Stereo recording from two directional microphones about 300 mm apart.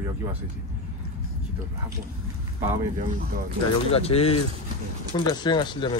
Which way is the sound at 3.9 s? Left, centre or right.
Centre.